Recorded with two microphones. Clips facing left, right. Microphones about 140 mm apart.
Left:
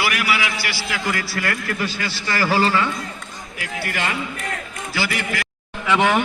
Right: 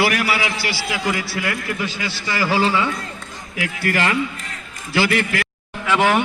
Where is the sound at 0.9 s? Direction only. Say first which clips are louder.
Right 1 dB; 15° right (ahead or behind).